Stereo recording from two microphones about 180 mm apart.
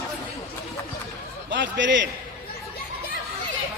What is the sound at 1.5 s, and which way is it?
Speech, 90° right.